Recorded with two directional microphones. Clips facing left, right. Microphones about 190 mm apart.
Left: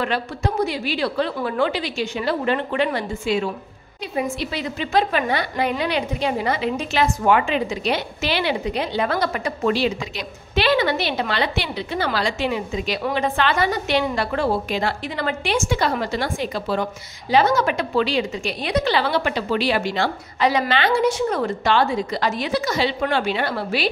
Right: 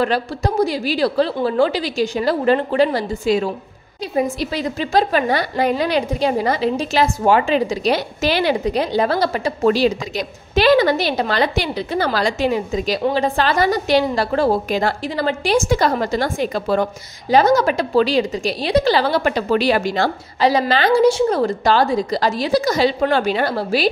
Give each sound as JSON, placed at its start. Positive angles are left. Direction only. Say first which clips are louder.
{"t": 0.0, "sound": "a woman's voice", "louder": "right 4 dB", "side_deg": -35}